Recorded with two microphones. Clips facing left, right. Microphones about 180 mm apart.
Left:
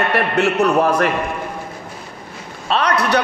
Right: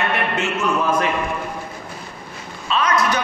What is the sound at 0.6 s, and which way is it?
Speech, 65° left (ahead or behind).